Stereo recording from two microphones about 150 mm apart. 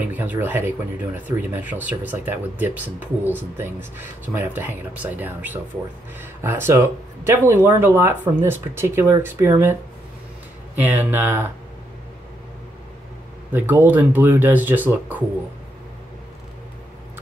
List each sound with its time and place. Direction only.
0.0 s speech: 10° right (ahead or behind)
10.8 s speech: 15° right (ahead or behind)
13.5 s speech: 15° right (ahead or behind)